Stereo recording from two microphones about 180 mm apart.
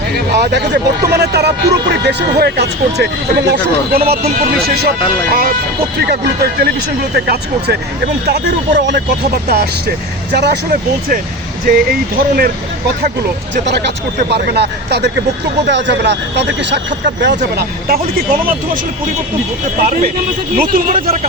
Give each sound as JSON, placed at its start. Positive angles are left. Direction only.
{"t": 0.3, "sound": "speech", "side_deg": -70}
{"t": 13.7, "sound": "speech", "side_deg": -70}
{"t": 15.6, "sound": "speech", "side_deg": -75}
{"t": 17.8, "sound": "speech", "side_deg": -55}